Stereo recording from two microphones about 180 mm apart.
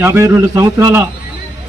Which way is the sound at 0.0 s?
15° right (ahead or behind).